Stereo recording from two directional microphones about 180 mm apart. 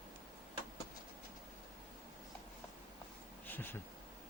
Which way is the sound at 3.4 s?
10° left (ahead or behind).